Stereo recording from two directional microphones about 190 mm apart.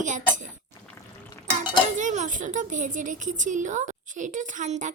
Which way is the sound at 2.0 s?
40° right (ahead or behind).